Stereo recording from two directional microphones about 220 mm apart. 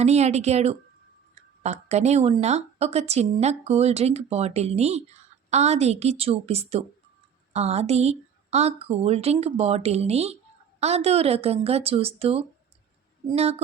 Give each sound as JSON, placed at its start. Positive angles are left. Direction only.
{"t": 0.0, "sound": "speech", "side_deg": -30}